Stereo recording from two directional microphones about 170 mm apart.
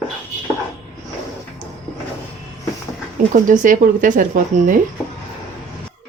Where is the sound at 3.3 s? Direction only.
50° right (ahead or behind).